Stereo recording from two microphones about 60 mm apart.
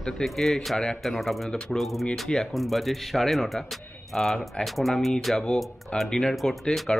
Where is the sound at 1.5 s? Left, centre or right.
Centre.